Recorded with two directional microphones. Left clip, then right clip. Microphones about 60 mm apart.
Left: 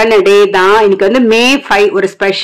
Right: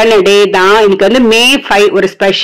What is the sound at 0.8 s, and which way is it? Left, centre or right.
Speech, right.